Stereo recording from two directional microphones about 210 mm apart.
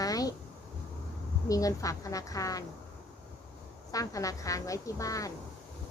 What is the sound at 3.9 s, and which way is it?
Speech, 15° left (ahead or behind).